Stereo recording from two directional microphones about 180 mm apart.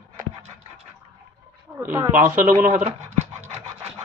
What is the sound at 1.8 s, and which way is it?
Speech, 10° right (ahead or behind).